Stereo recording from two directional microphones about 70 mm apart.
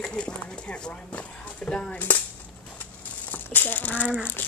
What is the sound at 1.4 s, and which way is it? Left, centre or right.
Speech, centre.